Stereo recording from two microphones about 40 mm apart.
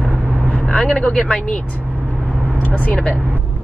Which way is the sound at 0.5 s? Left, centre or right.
Left.